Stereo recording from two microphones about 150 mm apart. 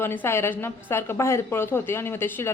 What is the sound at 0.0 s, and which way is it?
A woman's voice, 15° left (ahead or behind).